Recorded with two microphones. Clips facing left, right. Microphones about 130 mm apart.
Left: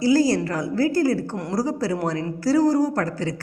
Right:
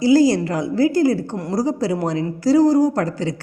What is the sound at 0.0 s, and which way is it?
Speech, 25° right (ahead or behind).